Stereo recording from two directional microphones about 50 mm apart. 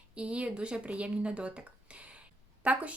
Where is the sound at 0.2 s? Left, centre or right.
Right.